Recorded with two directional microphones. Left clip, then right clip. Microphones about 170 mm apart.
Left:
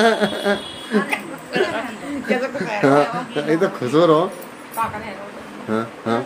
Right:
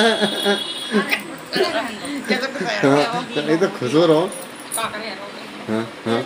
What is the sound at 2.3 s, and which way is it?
Speech, 50° left (ahead or behind).